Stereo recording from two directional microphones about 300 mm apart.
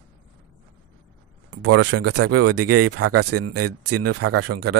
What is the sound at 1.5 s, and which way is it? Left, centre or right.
Speech, right.